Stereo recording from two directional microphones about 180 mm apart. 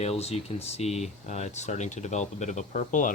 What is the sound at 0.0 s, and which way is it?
Speech, 35° left (ahead or behind).